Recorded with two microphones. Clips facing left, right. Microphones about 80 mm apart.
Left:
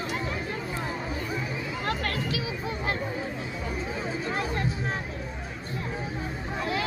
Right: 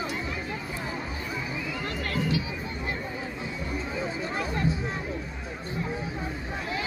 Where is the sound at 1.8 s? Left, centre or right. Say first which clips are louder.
Even; left.